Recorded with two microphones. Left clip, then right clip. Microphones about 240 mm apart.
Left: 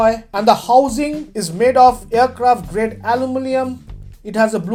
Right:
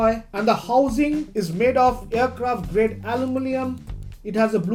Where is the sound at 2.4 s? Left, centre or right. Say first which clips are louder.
Left 6 dB; left.